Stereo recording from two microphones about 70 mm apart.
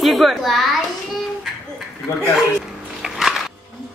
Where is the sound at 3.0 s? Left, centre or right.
Centre.